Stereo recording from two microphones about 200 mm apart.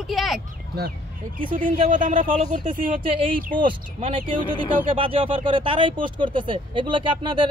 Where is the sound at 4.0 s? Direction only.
25° right (ahead or behind).